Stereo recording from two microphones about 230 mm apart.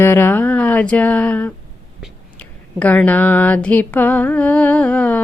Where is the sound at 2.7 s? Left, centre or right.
Centre.